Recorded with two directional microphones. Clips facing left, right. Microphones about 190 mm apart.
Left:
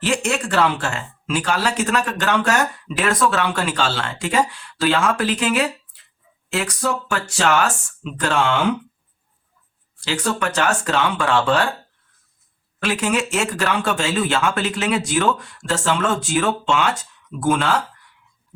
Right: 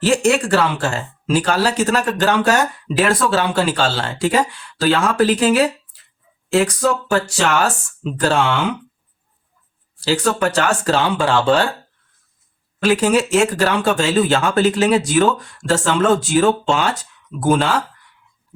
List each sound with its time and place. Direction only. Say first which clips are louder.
0.0 s speech: right 6 dB; 35° right (ahead or behind)
10.0 s speech: right 5 dB; 35° right (ahead or behind)
12.8 s speech: right 6 dB; 35° right (ahead or behind)